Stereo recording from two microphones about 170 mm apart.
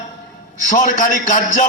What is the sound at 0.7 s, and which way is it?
Speech, 50° left (ahead or behind).